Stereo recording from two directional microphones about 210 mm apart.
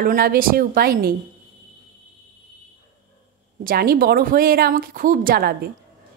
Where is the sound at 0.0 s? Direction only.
45° right (ahead or behind).